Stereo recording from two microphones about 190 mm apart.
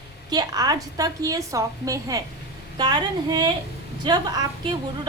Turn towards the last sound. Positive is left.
turn(degrees=-20)  # may be behind; listen again after turning